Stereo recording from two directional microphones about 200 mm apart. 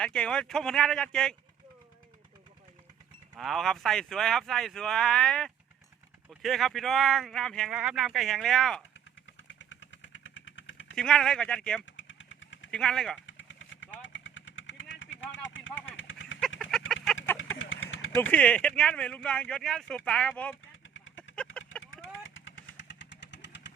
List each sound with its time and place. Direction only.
0.0 s speech: 5° left (ahead or behind)
3.3 s speech: centre (ahead or behind)
9.5 s vehicle: 65° left (ahead or behind)
10.9 s speech: 5° left (ahead or behind)
11.9 s vehicle: 70° left (ahead or behind)
12.7 s speech: 5° left (ahead or behind)
13.2 s vehicle: 70° left (ahead or behind)
16.9 s chicken: centre (ahead or behind)
17.6 s vehicle: 75° left (ahead or behind)
18.2 s speech: 5° left (ahead or behind)
22.4 s vehicle: 70° left (ahead or behind)